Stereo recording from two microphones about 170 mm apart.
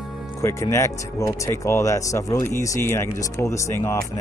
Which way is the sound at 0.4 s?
15° left (ahead or behind).